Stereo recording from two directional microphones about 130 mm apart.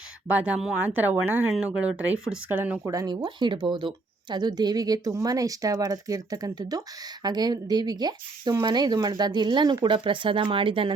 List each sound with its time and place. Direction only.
0.3 s speech: 10° right (ahead or behind)
2.5 s speech: 15° right (ahead or behind); by 10.9 s 40° right (ahead or behind)